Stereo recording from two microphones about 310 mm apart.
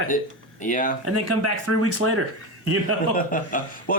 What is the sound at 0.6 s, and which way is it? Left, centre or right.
Speech, left.